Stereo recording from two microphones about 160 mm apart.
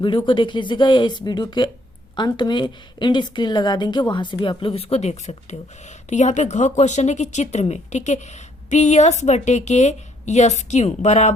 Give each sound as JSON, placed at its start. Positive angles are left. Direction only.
{"t": 0.3, "sound": "a woman's voice", "side_deg": 30}